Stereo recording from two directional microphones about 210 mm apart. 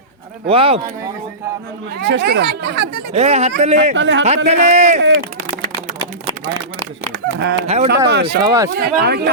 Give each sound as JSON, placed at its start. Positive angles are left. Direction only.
{"t": 0.4, "sound": "speech", "side_deg": -25}
{"t": 2.0, "sound": "speech", "side_deg": -55}
{"t": 3.1, "sound": "speech", "side_deg": -30}
{"t": 3.9, "sound": "speech", "side_deg": -60}
{"t": 4.4, "sound": "speech", "side_deg": -35}
{"t": 4.9, "sound": "speech", "side_deg": -55}
{"t": 7.1, "sound": "speech", "side_deg": -55}
{"t": 8.4, "sound": "speech", "side_deg": -15}
{"t": 8.7, "sound": "speech", "side_deg": -50}